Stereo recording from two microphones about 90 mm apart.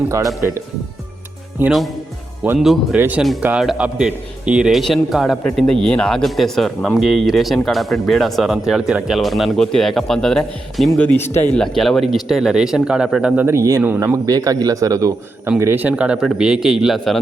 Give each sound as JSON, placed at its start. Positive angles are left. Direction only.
{"t": 1.6, "sound": "speech", "side_deg": -25}
{"t": 2.6, "sound": "a man's voice", "side_deg": -5}
{"t": 3.4, "sound": "a man's voice", "side_deg": -20}
{"t": 4.8, "sound": "a man's voice", "side_deg": 0}
{"t": 10.9, "sound": "speech", "side_deg": 20}
{"t": 11.5, "sound": "a man's voice", "side_deg": 5}
{"t": 13.5, "sound": "speech", "side_deg": -35}
{"t": 13.8, "sound": "speech", "side_deg": -20}
{"t": 14.3, "sound": "speech", "side_deg": -40}
{"t": 15.5, "sound": "a man's voice", "side_deg": -25}